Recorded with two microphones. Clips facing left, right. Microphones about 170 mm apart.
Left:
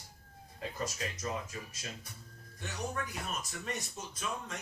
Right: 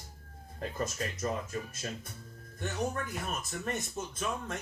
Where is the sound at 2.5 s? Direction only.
55° right (ahead or behind).